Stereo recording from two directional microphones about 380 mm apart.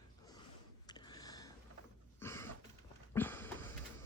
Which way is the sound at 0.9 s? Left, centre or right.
Centre.